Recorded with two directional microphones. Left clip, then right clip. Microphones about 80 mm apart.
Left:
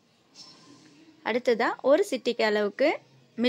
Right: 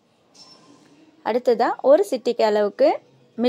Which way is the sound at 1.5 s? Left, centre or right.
Left.